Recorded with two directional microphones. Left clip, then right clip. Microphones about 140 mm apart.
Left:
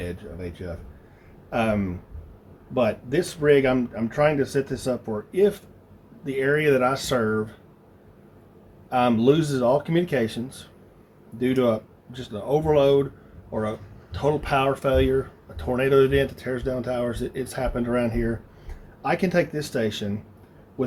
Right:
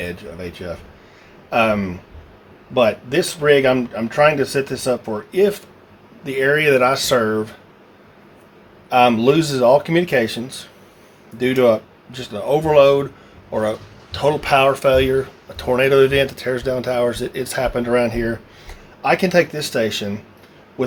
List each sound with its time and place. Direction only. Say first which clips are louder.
0.0 s speech: right 6 dB; 25° right (ahead or behind)
8.9 s speech: right 6 dB; 30° right (ahead or behind)